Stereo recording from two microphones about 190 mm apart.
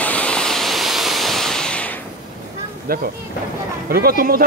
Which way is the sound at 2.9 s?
50° right (ahead or behind).